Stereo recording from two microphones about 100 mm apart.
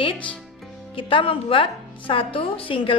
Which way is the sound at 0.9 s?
60° left (ahead or behind).